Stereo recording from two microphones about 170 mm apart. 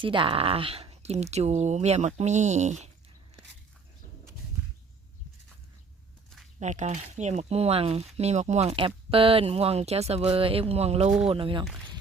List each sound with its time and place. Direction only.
0.0 s speech: 30° right (ahead or behind)
6.6 s speech: 45° right (ahead or behind)